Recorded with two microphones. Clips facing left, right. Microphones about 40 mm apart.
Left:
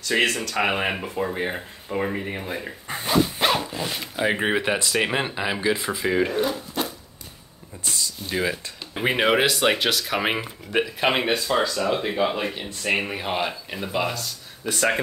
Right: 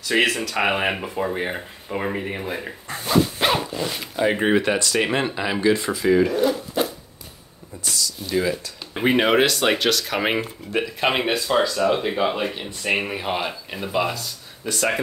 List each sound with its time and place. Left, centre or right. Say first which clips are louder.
0.0 s speech: right 2 dB; centre
2.9 s speech: right 1 dB; centre
3.3 s speech: right 1 dB; centre
7.8 s speech: right 2 dB; left
8.9 s speech: right 2 dB; centre